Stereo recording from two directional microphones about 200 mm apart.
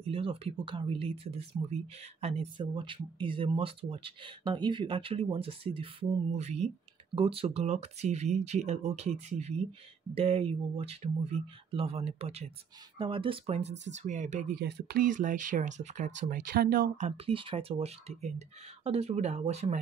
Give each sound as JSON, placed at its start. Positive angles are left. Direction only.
{"t": 0.1, "sound": "speech", "side_deg": -30}
{"t": 14.6, "sound": "speech", "side_deg": -55}